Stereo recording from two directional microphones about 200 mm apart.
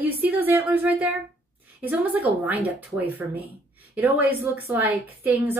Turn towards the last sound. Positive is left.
turn(degrees=-10)  # may be behind; listen again after turning